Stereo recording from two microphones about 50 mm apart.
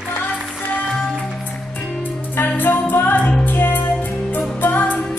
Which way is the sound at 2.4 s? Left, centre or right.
Left.